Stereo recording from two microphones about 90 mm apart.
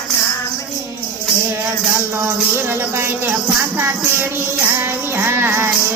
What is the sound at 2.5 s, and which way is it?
Speech, 25° right (ahead or behind).